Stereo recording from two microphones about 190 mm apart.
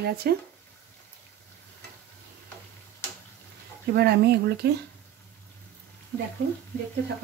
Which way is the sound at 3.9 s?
60° right (ahead or behind).